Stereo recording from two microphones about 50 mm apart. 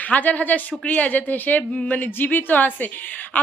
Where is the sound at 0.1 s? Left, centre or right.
Left.